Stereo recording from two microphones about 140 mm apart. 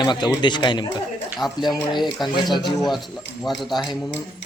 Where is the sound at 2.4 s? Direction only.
30° left (ahead or behind).